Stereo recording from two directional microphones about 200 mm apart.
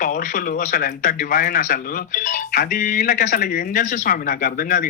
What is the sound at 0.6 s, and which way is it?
A man's voice, 50° left (ahead or behind).